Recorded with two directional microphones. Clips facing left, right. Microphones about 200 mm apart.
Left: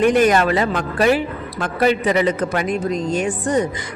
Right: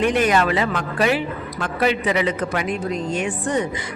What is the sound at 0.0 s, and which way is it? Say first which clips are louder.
A woman's voice: left 4 dB; 45° left (ahead or behind).